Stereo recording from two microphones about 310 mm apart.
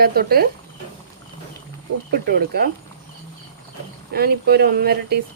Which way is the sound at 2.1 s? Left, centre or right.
Right.